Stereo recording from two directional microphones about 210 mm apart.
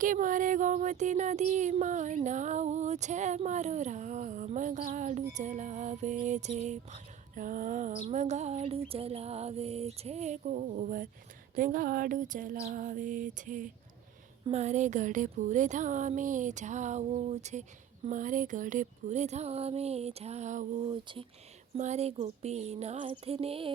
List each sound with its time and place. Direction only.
0.0 s music: 40° right (ahead or behind)
20.8 s speech: 25° right (ahead or behind)
21.8 s music: 30° right (ahead or behind)